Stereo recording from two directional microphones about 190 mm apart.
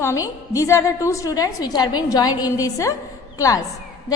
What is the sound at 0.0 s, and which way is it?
A woman's voice, 15° left (ahead or behind).